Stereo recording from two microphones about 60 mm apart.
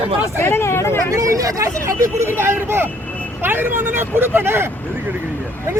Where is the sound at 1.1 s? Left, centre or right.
Right.